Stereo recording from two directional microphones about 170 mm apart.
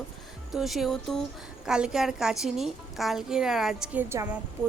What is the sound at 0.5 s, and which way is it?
A woman's voice, centre (ahead or behind).